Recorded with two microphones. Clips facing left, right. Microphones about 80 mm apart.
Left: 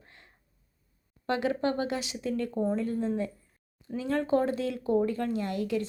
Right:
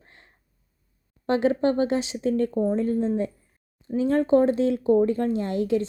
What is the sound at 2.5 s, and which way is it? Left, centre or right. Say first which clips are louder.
Speech: right 5 dB; centre.